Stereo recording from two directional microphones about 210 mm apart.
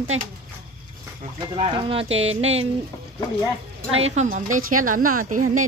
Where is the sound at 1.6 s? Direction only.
30° right (ahead or behind).